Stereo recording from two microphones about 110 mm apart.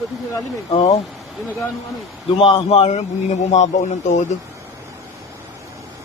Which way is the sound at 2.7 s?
85° left.